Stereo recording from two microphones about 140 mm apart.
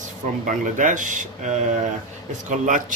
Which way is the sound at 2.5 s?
70° right (ahead or behind).